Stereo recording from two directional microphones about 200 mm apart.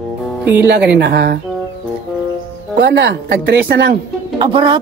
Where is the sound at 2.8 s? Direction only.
55° right (ahead or behind).